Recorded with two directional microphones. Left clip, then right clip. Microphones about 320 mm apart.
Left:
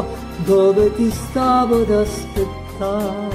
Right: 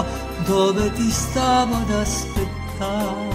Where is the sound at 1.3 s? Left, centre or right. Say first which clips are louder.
Left 4 dB; right.